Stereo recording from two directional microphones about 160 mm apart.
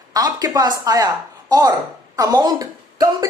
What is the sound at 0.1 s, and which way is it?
A woman's voice, 25° right (ahead or behind).